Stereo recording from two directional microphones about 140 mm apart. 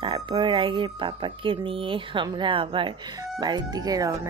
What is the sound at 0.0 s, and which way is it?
Speech, 40° right (ahead or behind).